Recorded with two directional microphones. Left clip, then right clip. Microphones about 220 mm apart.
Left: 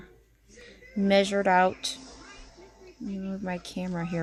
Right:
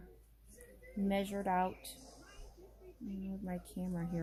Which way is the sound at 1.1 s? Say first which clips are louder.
Left 14 dB; 45° left (ahead or behind).